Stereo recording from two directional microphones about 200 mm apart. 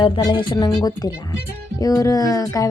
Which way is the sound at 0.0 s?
25° left (ahead or behind).